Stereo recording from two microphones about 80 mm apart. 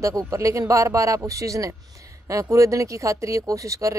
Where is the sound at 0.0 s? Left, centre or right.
Right.